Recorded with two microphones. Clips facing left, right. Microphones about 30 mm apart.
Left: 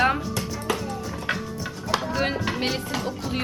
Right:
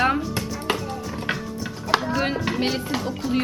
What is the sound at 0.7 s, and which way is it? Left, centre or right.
Music, right.